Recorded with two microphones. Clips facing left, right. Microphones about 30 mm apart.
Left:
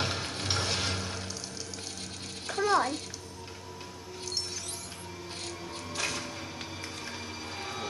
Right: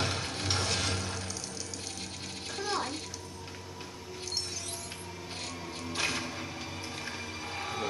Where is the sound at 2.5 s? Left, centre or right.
Centre.